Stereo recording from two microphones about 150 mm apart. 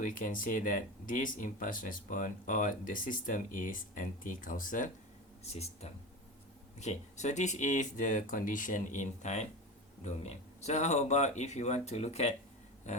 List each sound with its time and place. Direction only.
0.0 s speech: 65° left (ahead or behind)
5.4 s speech: 45° left (ahead or behind)
12.9 s dog: 50° left (ahead or behind)